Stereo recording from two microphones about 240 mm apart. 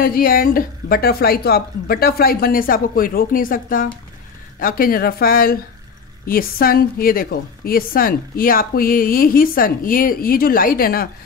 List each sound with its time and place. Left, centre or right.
0.0 s a woman's voice: left